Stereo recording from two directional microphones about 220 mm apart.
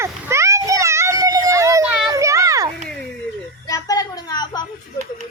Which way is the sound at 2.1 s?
15° right (ahead or behind).